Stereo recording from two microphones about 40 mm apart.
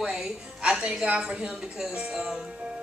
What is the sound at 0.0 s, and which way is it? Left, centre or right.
Music, right.